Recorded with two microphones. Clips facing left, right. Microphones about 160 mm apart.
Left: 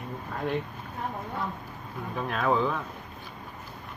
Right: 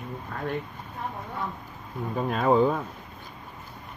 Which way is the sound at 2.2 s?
35° right (ahead or behind).